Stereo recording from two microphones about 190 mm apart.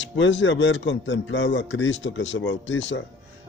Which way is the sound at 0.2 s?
75° left (ahead or behind).